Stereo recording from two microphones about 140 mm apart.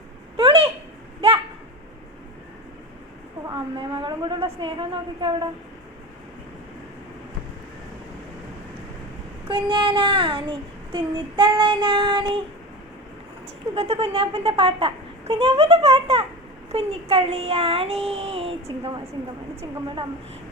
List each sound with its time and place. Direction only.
0.3 s a sound: 45° right (ahead or behind)
3.5 s child singing: 35° right (ahead or behind)
9.5 s child singing: 35° right (ahead or behind)
13.7 s speech: 45° right (ahead or behind)